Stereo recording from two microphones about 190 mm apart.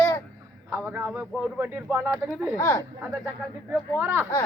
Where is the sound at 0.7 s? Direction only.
10° right (ahead or behind).